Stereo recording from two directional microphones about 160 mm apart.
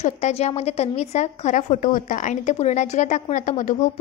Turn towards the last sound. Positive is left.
turn(degrees=50)  # may be behind; listen again after turning